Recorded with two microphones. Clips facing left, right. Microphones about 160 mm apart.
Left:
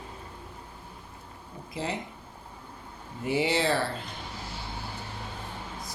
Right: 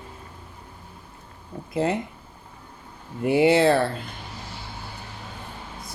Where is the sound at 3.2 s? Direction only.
60° right (ahead or behind).